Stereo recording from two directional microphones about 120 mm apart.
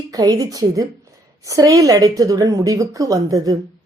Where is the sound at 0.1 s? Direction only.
30° right (ahead or behind).